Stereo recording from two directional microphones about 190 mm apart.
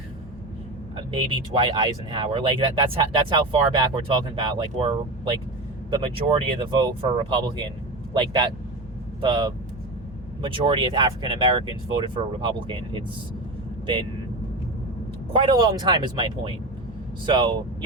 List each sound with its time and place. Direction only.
1.5 s speech: 25° right (ahead or behind)
15.3 s speech: 25° right (ahead or behind)